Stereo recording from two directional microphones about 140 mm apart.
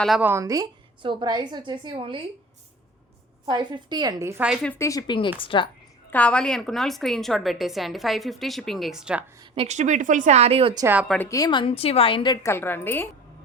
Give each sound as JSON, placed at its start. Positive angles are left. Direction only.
{"t": 0.2, "sound": "a woman's voice", "side_deg": -20}
{"t": 3.4, "sound": "a woman's voice", "side_deg": -35}
{"t": 4.4, "sound": "a woman's voice", "side_deg": 0}
{"t": 4.7, "sound": "a woman's voice", "side_deg": 20}
{"t": 6.1, "sound": "a woman's voice", "side_deg": 10}
{"t": 9.6, "sound": "speech", "side_deg": -55}
{"t": 11.3, "sound": "a woman's voice", "side_deg": 30}
{"t": 12.5, "sound": "a woman's voice", "side_deg": 15}